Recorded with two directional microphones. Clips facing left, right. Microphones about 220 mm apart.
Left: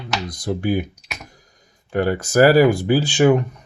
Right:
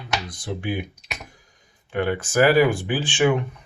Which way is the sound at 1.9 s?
40° left (ahead or behind).